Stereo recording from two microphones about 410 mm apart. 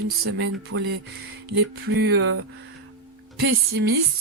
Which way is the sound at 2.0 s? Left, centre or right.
Right.